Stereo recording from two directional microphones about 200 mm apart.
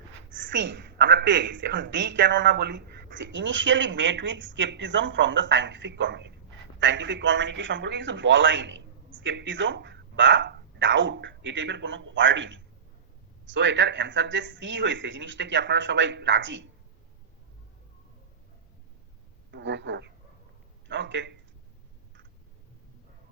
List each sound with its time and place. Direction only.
0.3 s a woman's voice: 65° right (ahead or behind)
19.5 s a woman's voice: 60° right (ahead or behind)